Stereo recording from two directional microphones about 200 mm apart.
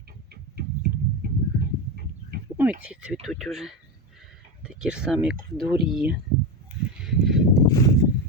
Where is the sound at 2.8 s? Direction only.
5° right (ahead or behind).